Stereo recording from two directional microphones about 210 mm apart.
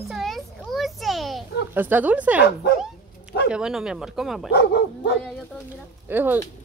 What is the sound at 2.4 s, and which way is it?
Speech, 50° left (ahead or behind).